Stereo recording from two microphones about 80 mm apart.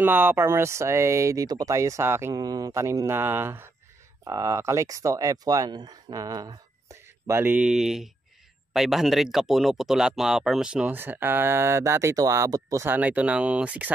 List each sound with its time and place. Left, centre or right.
0.0 s speech: right
1.5 s speech: right
1.8 s speech: right
2.3 s speech: right
2.7 s speech: right
4.2 s speech: right
6.9 s a sound: right
7.4 s speech: centre
7.7 s speech: centre
10.9 s speech: right
12.8 s speech: right